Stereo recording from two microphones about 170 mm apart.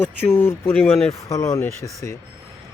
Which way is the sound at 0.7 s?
10° left (ahead or behind).